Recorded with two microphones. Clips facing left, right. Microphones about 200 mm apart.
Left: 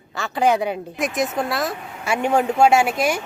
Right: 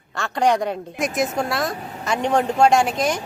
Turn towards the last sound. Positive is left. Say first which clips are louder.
# left 1 dB
turn(degrees=10)  # may be behind; listen again after turning